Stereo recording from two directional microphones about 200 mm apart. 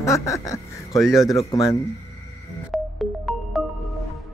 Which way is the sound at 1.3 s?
15° left (ahead or behind).